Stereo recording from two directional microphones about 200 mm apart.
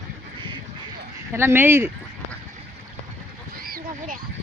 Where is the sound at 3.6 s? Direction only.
45° right (ahead or behind).